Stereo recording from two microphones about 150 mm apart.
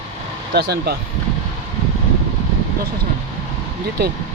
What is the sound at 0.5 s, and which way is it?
Speech, 90° right.